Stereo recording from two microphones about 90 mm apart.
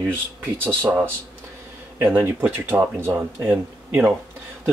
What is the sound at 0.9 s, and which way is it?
Speech, 25° right (ahead or behind).